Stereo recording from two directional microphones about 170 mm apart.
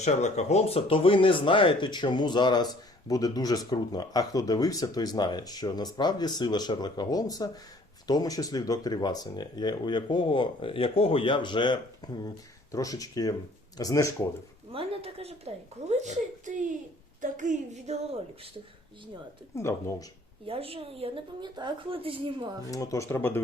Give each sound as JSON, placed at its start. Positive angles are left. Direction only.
{"t": 0.0, "sound": "speech", "side_deg": 40}
{"t": 14.7, "sound": "a woman's voice", "side_deg": -35}
{"t": 17.2, "sound": "a sound", "side_deg": -50}
{"t": 19.5, "sound": "speech", "side_deg": 15}
{"t": 20.5, "sound": "a woman's voice", "side_deg": -35}
{"t": 22.7, "sound": "speech", "side_deg": 20}